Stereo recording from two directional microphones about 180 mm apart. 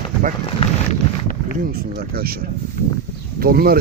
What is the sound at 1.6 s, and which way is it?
Speech, 55° right (ahead or behind).